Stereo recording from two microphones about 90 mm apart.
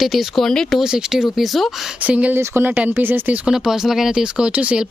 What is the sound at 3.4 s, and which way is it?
Speech, 5° right (ahead or behind).